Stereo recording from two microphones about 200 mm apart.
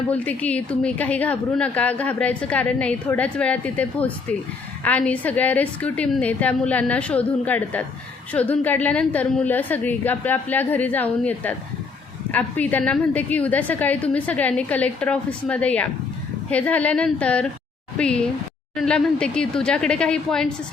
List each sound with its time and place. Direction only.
0.1 s a woman's voice: 5° left (ahead or behind)